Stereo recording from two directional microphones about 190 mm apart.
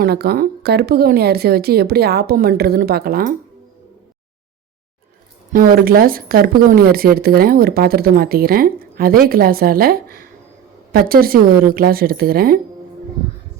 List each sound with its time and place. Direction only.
0.0 s speech: 55° right (ahead or behind)
5.5 s speech: 50° right (ahead or behind)